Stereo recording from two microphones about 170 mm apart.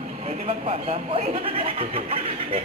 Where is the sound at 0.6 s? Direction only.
40° right (ahead or behind).